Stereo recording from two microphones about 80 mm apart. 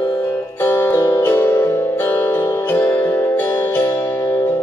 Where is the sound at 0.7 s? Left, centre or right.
Left.